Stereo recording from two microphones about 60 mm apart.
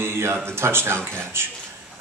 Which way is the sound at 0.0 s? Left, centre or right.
Right.